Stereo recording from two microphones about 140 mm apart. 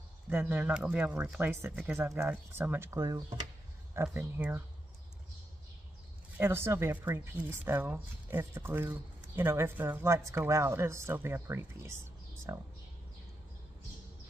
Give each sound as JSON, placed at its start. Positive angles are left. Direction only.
{"t": 0.3, "sound": "speech", "side_deg": -10}
{"t": 6.3, "sound": "speech", "side_deg": -15}